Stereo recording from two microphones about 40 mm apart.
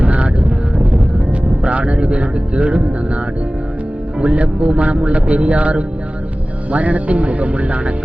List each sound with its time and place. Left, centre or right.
0.0 s vehicle: right
1.6 s speech: right
4.2 s speech: right